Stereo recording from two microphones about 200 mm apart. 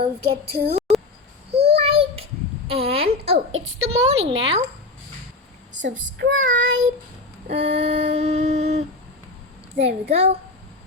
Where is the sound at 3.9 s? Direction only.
30° right (ahead or behind).